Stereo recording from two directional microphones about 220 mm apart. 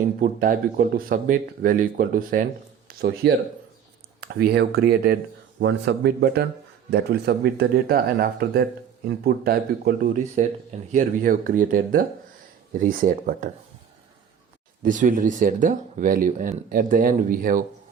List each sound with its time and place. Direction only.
0.2 s speech: 40° right (ahead or behind)
4.4 s speech: 45° right (ahead or behind)
14.8 s speech: 35° right (ahead or behind)